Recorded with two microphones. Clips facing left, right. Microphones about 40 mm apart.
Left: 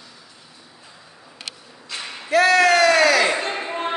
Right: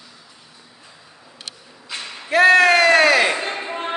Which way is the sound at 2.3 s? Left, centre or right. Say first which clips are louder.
Right 3 dB; right.